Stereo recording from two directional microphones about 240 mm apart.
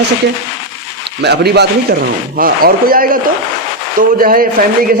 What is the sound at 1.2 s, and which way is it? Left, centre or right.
A man's voice, right.